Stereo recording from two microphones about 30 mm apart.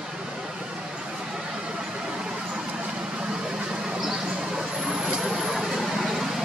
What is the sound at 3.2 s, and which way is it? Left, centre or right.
Vehicle, right.